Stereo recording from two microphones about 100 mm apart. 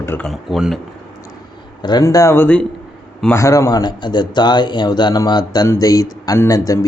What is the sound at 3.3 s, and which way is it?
Speech, 30° left (ahead or behind).